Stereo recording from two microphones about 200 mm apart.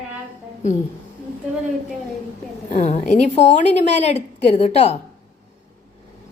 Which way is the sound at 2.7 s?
35° left (ahead or behind).